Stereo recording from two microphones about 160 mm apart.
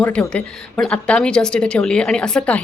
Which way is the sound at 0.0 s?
5° left (ahead or behind).